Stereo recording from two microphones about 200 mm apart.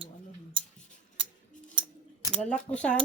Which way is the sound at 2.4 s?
5° left (ahead or behind).